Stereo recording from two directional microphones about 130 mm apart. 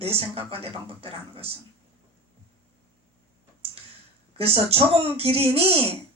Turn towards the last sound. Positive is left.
turn(degrees=-50)  # may be behind; listen again after turning